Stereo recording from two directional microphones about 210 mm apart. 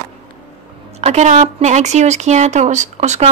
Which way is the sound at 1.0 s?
30° right (ahead or behind).